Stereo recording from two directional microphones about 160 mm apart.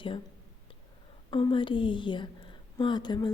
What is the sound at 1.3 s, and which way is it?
A woman's voice, 30° left (ahead or behind).